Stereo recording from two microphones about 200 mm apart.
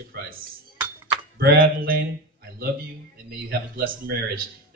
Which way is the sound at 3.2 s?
50° right (ahead or behind).